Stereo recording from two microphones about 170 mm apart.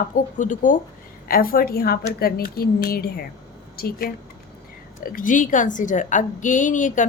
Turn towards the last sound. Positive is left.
turn(degrees=50)  # may be behind; listen again after turning